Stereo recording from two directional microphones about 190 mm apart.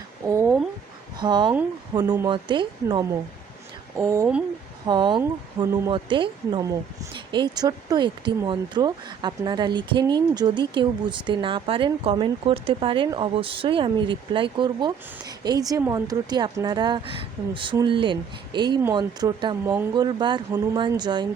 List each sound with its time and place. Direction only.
0.3 s speech: 15° right (ahead or behind)
1.2 s speech: 25° right (ahead or behind)